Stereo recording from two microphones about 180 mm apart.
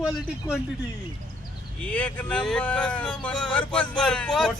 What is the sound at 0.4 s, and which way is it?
Speech, 20° left (ahead or behind).